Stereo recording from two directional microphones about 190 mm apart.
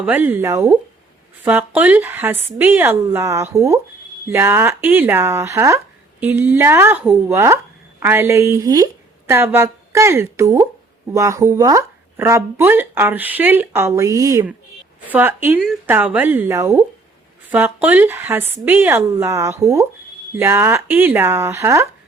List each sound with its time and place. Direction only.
0.0 s speech: 10° right (ahead or behind)